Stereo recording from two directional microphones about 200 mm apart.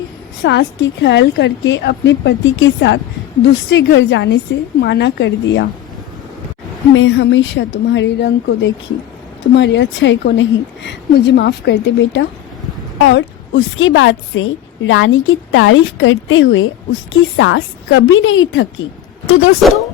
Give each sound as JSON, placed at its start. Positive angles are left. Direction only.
{"t": 0.4, "sound": "a woman's voice", "side_deg": 60}
{"t": 6.9, "sound": "a woman's voice", "side_deg": 75}
{"t": 19.3, "sound": "speech", "side_deg": 90}